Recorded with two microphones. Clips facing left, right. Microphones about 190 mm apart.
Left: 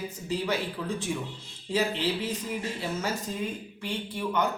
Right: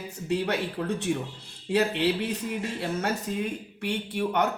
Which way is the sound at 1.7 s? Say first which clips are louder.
Right 3 dB; 65° right (ahead or behind).